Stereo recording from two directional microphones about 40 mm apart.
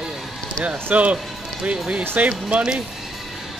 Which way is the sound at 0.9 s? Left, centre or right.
Right.